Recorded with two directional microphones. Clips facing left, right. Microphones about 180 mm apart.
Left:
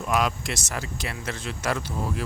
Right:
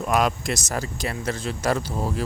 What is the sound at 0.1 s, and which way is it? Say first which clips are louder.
Speech: right 3 dB; 45° right (ahead or behind).